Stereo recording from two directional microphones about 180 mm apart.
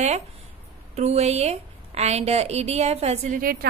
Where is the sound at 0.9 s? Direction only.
35° right (ahead or behind).